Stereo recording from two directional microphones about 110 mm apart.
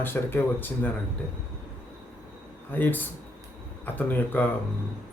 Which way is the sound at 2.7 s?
15° left (ahead or behind).